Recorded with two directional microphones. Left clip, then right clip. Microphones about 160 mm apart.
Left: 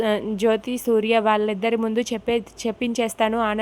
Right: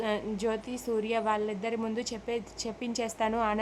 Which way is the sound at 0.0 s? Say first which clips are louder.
Left 10 dB; 35° left (ahead or behind).